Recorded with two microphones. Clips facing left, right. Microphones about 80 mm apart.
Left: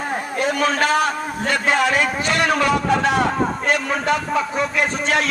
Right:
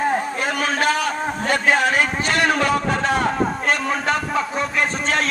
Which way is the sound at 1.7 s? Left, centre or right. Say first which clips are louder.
Left 2 dB; right.